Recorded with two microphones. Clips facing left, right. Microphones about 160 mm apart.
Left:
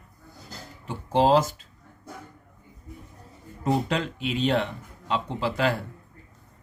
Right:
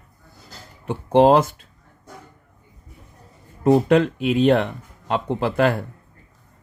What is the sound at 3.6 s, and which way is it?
Speech, 55° right (ahead or behind).